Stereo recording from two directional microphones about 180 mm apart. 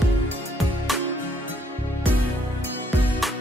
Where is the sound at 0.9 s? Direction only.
Centre (ahead or behind).